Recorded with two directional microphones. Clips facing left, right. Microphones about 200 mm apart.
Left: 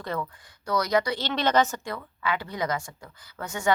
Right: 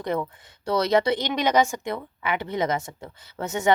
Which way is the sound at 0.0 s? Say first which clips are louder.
Right 5 dB; 20° right (ahead or behind).